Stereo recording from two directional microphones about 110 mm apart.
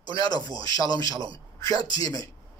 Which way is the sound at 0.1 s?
40° left (ahead or behind).